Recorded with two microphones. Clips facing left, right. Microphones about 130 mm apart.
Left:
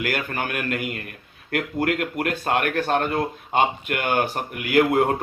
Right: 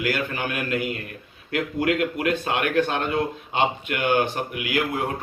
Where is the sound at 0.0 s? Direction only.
50° left (ahead or behind).